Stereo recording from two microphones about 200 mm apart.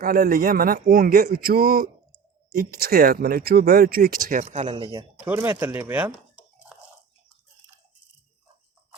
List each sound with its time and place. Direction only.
0.0 s speech: 45° right (ahead or behind); by 5.0 s 25° right (ahead or behind)
5.2 s speech: 10° right (ahead or behind)